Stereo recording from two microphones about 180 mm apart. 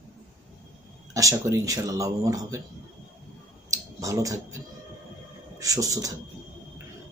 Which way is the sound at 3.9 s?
20° right (ahead or behind).